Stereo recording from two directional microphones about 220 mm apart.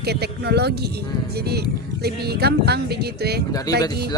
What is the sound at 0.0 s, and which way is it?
Speech, 45° right (ahead or behind).